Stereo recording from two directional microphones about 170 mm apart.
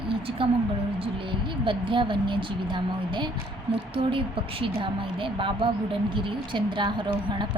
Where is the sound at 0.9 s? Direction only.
30° right (ahead or behind).